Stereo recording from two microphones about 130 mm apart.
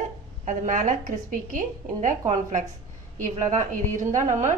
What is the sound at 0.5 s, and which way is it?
A woman's voice, 75° right (ahead or behind).